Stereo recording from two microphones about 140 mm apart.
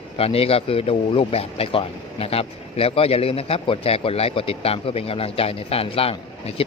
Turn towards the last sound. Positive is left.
turn(degrees=45)  # may be behind; listen again after turning